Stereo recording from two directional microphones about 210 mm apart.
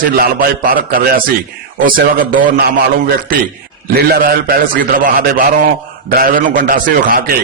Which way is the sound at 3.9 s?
45° right (ahead or behind).